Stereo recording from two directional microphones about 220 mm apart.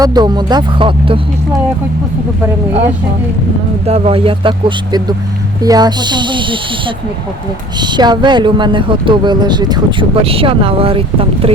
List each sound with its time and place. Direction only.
0.0 s speech: 20° right (ahead or behind)
3.8 s speech: 25° right (ahead or behind)